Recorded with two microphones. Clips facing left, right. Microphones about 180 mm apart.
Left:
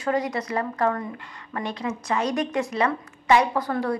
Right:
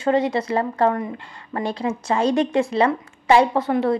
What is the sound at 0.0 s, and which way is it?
Speech, 25° right (ahead or behind).